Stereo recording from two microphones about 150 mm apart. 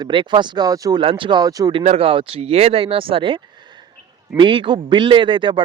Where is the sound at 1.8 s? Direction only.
45° right (ahead or behind).